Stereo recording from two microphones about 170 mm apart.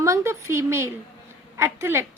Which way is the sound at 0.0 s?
15° right (ahead or behind).